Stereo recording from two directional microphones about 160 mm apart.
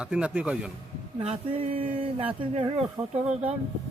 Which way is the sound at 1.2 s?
35° right (ahead or behind).